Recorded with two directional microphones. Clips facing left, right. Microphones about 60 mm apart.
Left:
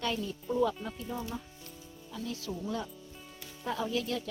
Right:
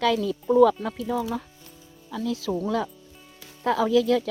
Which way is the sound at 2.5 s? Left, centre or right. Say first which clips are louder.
Right 13 dB; right.